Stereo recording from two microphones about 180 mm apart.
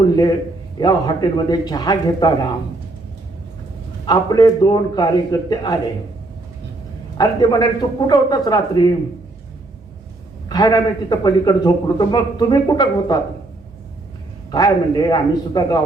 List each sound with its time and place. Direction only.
0.8 s a man's voice: 20° left (ahead or behind)
4.0 s a man's voice: 20° left (ahead or behind)
7.2 s a man's voice: 20° left (ahead or behind)
10.5 s a man's voice: 20° left (ahead or behind)
14.5 s a man's voice: 20° left (ahead or behind)